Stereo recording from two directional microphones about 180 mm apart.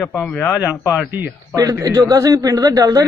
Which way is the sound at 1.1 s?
15° right (ahead or behind).